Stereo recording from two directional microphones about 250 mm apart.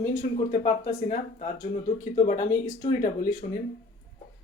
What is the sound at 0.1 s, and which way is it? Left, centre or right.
Speech, left.